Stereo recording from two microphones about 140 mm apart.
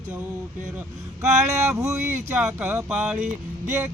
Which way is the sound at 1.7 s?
20° right (ahead or behind).